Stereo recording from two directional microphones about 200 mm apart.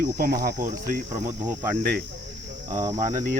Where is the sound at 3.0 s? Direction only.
40° right (ahead or behind).